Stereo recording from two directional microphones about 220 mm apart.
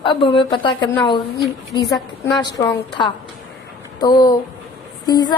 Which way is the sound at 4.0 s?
20° left (ahead or behind).